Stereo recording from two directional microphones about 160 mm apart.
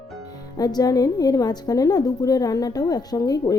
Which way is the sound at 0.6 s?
25° left (ahead or behind).